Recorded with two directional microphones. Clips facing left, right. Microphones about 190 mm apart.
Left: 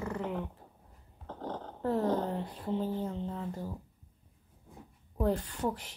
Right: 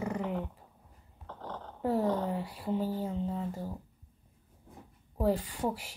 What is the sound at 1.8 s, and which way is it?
Speech, 10° right (ahead or behind).